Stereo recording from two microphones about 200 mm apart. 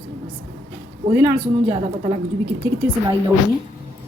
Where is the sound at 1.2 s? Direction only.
20° right (ahead or behind).